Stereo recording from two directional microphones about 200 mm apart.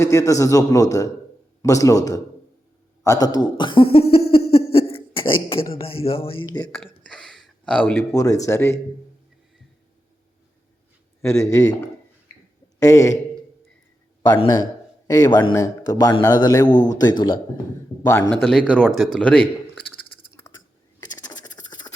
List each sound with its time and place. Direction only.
0.0 s a man's voice: 15° left (ahead or behind)
3.0 s a sound: 15° left (ahead or behind)
5.8 s speech: 30° left (ahead or behind)
7.0 s a man's voice: 5° left (ahead or behind)
11.2 s a man's voice: 15° left (ahead or behind)
12.8 s a man's voice: 15° left (ahead or behind)
14.2 s a man's voice: 20° left (ahead or behind)
18.2 s speech: centre (ahead or behind)
21.4 s a sound: 20° left (ahead or behind)